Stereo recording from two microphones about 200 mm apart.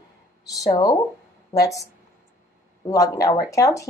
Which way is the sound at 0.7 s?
20° left (ahead or behind).